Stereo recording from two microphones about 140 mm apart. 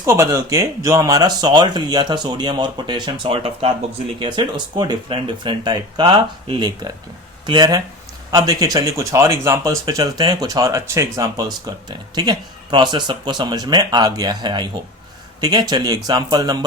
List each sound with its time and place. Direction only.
0.0 s speech: 20° right (ahead or behind)